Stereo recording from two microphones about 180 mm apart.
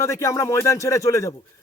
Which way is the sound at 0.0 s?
15° left (ahead or behind).